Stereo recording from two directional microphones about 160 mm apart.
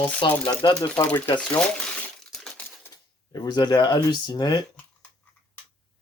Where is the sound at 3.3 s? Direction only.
25° left (ahead or behind).